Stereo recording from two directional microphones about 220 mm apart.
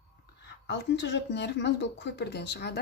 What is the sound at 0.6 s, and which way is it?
A woman's voice, 50° left (ahead or behind).